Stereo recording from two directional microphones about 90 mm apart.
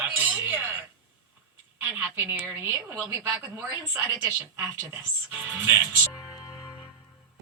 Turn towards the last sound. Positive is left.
turn(degrees=-5)  # may be behind; listen again after turning